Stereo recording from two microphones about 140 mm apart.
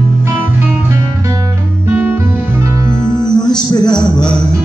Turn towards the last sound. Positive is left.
turn(degrees=30)  # may be behind; listen again after turning